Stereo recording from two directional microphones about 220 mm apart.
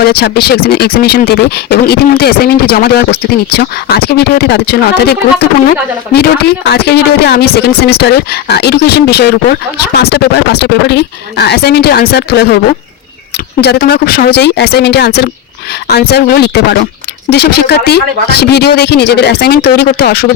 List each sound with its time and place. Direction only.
0.0 s speech: 45° left (ahead or behind)
13.6 s speech: 45° left (ahead or behind)